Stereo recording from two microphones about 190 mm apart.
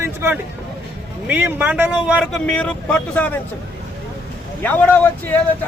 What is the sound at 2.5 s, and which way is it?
Speech, 5° left (ahead or behind).